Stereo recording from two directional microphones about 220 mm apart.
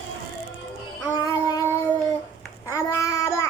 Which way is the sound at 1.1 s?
15° left (ahead or behind).